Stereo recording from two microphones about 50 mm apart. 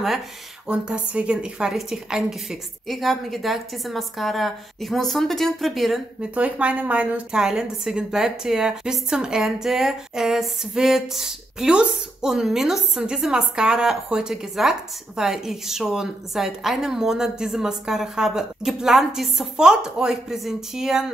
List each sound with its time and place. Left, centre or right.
0.7 s a woman's voice: right
1.7 s speech: centre
2.9 s a woman's voice: centre
6.3 s a woman's voice: right
7.3 s speech: centre
11.7 s a woman's voice: right
12.3 s speech: centre